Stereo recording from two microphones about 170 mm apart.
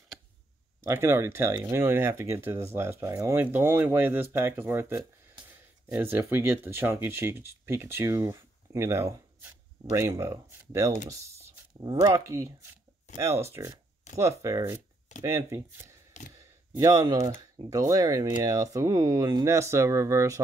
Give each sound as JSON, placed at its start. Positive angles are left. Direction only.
{"t": 0.8, "sound": "speech", "side_deg": -15}